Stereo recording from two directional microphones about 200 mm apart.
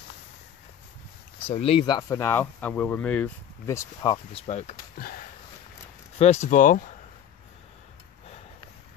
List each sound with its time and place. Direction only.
1.5 s speech: 30° left (ahead or behind)
4.1 s speech: 30° left (ahead or behind)
6.1 s speech: 35° left (ahead or behind)